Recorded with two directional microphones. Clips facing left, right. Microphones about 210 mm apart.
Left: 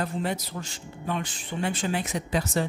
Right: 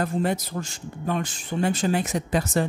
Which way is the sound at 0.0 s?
45° right (ahead or behind).